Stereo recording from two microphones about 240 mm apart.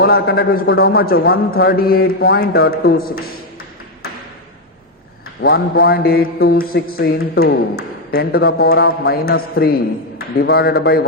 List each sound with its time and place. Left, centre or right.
0.0 s a man's voice: left
5.4 s a man's voice: left